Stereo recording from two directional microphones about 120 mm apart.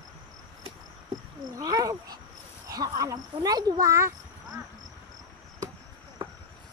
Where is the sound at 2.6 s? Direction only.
30° right (ahead or behind).